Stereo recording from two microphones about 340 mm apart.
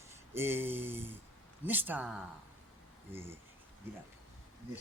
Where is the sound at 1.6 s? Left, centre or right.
Centre.